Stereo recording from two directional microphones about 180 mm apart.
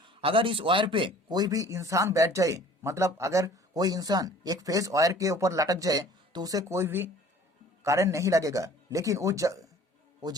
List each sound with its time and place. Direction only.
0.2 s a man's voice: 30° right (ahead or behind)